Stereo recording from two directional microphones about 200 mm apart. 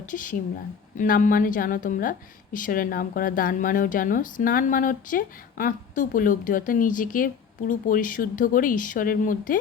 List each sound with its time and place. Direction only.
0.0 s a woman's voice: 40° left (ahead or behind)